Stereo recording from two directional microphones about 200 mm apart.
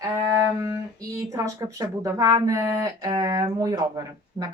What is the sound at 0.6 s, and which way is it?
Speech, 15° right (ahead or behind).